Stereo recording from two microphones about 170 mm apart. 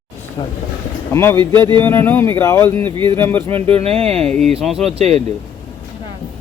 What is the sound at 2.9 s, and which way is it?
Speech, 30° right (ahead or behind).